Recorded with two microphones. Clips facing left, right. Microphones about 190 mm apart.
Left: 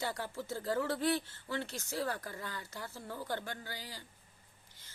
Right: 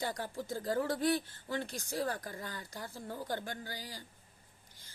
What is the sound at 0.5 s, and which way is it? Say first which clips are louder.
Speech: right 1 dB; 40° right (ahead or behind).